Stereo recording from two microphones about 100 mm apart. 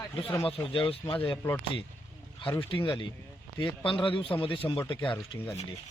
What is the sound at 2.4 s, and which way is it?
A man's voice, 60° left (ahead or behind).